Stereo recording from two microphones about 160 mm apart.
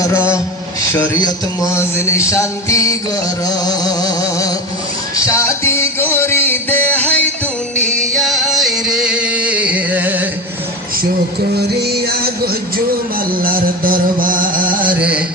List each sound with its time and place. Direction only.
0.9 s a man's voice: 20° left (ahead or behind)
5.1 s a sound: 20° left (ahead or behind)
8.1 s music: centre (ahead or behind)
13.3 s music: 65° right (ahead or behind)
15.0 s music: 5° right (ahead or behind)